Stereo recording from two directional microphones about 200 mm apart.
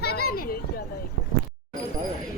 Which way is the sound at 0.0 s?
50° left (ahead or behind).